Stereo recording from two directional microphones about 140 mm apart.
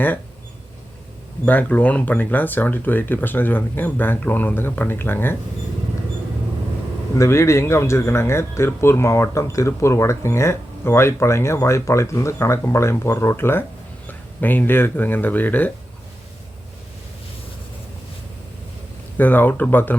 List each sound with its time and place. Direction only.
1.5 s speech: 10° left (ahead or behind)
7.2 s speech: 20° left (ahead or behind)
19.1 s speech: 15° left (ahead or behind)